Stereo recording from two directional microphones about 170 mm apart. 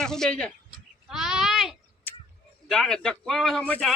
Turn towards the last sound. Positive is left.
turn(degrees=5)  # may be behind; listen again after turning